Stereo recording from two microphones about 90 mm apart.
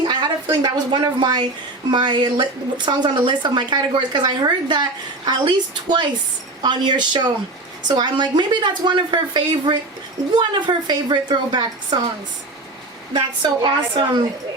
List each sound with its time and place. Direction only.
0.6 s speech: 60° right (ahead or behind)
13.1 s speech: 55° right (ahead or behind)